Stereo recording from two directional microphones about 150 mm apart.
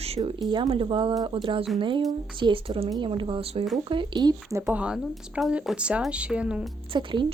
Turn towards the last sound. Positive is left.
turn(degrees=-35)  # may be behind; listen again after turning